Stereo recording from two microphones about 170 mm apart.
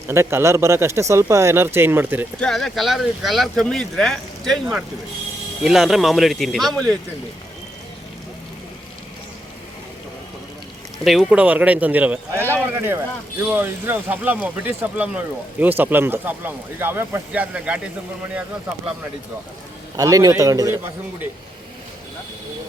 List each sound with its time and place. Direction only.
0.1 s speech: 15° right (ahead or behind)
2.4 s speech: centre (ahead or behind)
11.0 s speech: centre (ahead or behind)
20.0 s a man's voice: 20° right (ahead or behind)